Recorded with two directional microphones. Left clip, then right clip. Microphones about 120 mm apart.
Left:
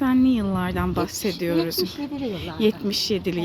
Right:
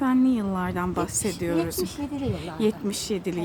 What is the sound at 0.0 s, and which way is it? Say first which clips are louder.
A woman's voice: left 2 dB; 10° left (ahead or behind).